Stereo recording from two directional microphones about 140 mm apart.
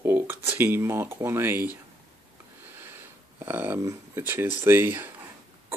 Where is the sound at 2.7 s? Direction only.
15° right (ahead or behind).